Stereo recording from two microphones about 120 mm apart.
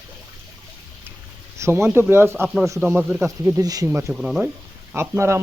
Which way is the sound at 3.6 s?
30° right (ahead or behind).